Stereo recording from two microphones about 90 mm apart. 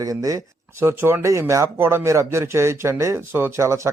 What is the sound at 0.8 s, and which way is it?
Speech, 30° right (ahead or behind).